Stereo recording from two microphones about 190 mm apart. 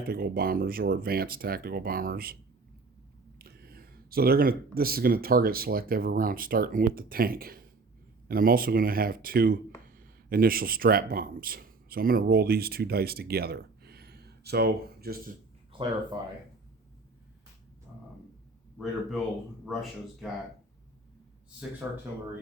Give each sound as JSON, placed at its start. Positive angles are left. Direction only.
{"t": 0.0, "sound": "speech", "side_deg": -55}
{"t": 18.8, "sound": "speech", "side_deg": 10}
{"t": 21.8, "sound": "speech", "side_deg": -5}